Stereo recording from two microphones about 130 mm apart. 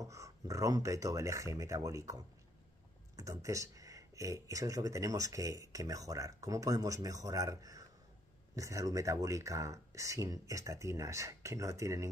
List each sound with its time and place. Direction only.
0.0 s speech: 25° right (ahead or behind)